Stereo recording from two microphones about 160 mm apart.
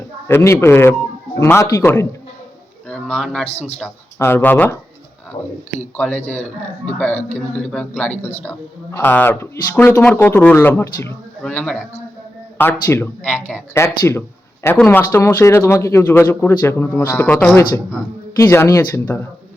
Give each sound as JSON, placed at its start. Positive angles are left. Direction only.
{"t": 0.3, "sound": "speech", "side_deg": 15}
{"t": 6.0, "sound": "speech", "side_deg": 10}